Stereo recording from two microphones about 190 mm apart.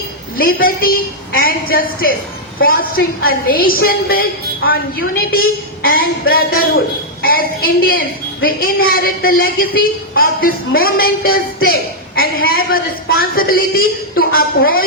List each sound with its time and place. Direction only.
0.3 s a woman's voice: 50° left (ahead or behind)